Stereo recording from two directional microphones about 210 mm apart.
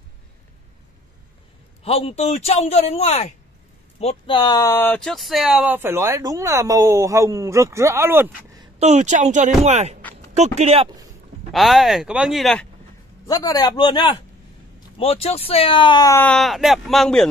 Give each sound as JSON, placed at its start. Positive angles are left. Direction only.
{"t": 1.8, "sound": "a man's voice", "side_deg": 30}
{"t": 8.7, "sound": "speech", "side_deg": -30}
{"t": 11.5, "sound": "speech", "side_deg": 0}
{"t": 13.3, "sound": "a man's voice", "side_deg": 20}